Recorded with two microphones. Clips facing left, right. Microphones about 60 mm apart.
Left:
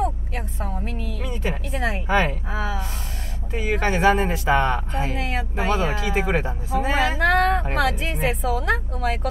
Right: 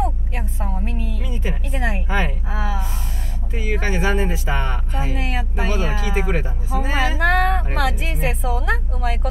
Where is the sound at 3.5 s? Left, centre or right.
Left.